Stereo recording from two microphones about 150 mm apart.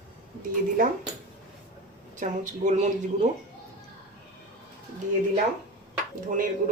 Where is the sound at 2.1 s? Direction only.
55° right (ahead or behind).